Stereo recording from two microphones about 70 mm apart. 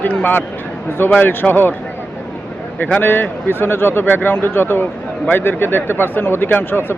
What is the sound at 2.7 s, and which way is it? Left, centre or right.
Speech, left.